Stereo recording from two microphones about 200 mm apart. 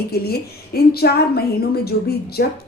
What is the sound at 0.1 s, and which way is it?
A woman's voice, 50° left (ahead or behind).